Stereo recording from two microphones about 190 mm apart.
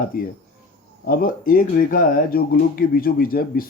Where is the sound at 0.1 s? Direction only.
45° left (ahead or behind).